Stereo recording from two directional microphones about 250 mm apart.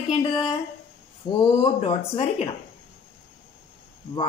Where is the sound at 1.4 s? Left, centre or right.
Left.